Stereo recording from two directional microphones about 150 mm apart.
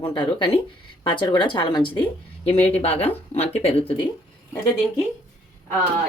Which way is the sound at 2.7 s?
40° left (ahead or behind).